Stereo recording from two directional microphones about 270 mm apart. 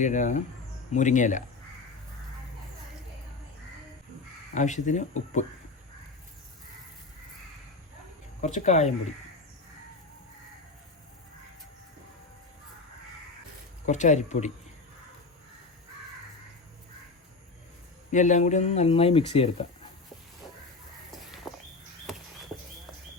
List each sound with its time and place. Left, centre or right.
0.0 s speech: left
4.5 s speech: left
8.4 s speech: left
13.8 s speech: left
18.1 s speech: left
21.1 s a sound: centre